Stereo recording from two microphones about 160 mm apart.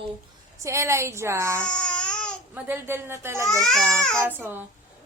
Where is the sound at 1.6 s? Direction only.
5° left (ahead or behind).